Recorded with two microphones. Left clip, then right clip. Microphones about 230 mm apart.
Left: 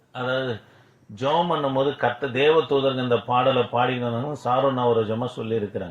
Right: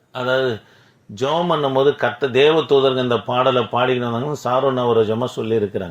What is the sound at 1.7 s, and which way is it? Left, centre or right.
Speech, right.